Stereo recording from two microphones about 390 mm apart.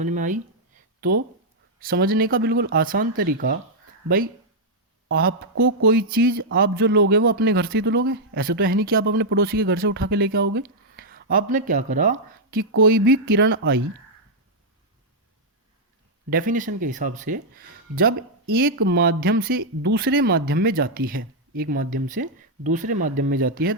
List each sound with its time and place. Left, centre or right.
0.0 s a man's voice: centre
1.8 s a man's voice: right
5.0 s a man's voice: right
16.3 s a man's voice: right